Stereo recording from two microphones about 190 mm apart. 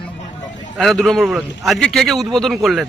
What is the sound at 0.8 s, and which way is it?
A man's voice, centre (ahead or behind).